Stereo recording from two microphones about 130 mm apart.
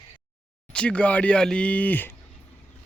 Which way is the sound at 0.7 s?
10° left (ahead or behind).